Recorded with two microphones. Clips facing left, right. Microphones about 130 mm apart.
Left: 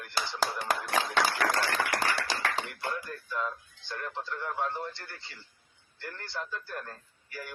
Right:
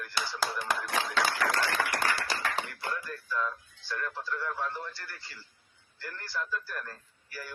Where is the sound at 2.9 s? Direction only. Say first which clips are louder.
Right 1 dB; 20° left (ahead or behind).